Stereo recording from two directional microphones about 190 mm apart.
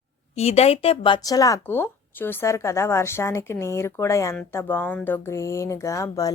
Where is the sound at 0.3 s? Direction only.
35° left (ahead or behind).